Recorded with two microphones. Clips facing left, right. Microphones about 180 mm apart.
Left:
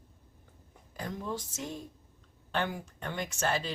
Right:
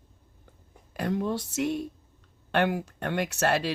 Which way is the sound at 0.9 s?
70° right (ahead or behind).